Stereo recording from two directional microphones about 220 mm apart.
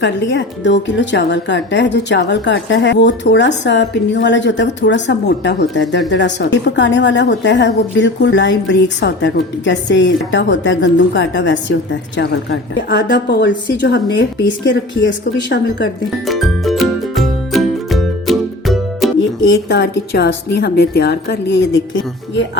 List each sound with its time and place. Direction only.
0.0 s a woman's voice: 55° left (ahead or behind)
16.2 s music: centre (ahead or behind)
19.5 s a woman's voice: 55° left (ahead or behind)